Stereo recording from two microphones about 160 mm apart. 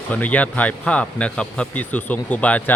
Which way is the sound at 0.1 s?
10° left (ahead or behind).